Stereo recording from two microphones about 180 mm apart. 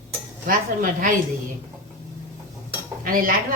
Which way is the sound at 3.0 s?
50° right (ahead or behind).